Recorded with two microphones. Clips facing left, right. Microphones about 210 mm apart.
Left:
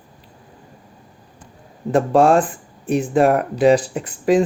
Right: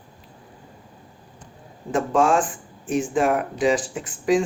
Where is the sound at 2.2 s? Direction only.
60° left (ahead or behind).